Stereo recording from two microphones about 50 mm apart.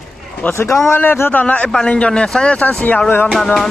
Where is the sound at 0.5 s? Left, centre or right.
Left.